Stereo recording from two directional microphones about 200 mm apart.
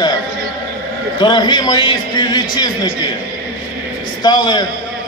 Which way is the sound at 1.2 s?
20° left (ahead or behind).